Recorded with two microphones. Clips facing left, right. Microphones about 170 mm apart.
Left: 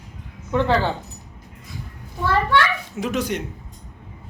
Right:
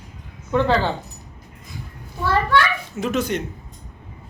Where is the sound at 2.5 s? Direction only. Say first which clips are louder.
Right 1 dB; 15° left (ahead or behind).